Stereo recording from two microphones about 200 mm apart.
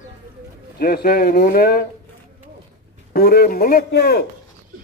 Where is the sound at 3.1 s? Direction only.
50° left (ahead or behind).